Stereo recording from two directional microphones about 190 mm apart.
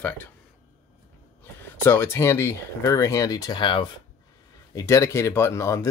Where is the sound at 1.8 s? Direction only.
10° left (ahead or behind).